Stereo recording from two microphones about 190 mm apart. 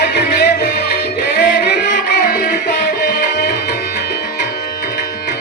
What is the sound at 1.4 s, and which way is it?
Music, 60° left (ahead or behind).